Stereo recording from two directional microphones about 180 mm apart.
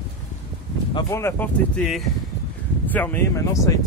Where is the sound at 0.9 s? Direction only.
15° left (ahead or behind).